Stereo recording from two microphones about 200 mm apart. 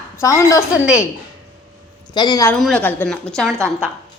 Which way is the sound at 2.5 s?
5° left (ahead or behind).